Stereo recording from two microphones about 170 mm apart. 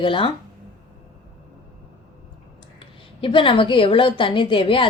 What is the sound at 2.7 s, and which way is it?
A woman's voice, 30° left (ahead or behind).